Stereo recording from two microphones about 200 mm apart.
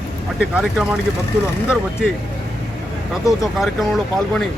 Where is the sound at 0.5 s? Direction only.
Centre (ahead or behind).